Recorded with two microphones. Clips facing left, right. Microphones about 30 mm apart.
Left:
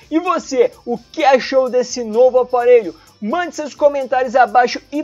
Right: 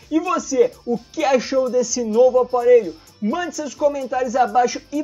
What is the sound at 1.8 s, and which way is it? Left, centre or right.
Speech, left.